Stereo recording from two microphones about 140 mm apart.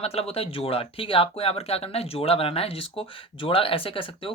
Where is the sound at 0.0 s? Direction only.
45° left (ahead or behind).